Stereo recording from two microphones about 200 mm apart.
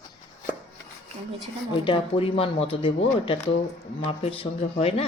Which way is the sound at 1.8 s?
25° left (ahead or behind).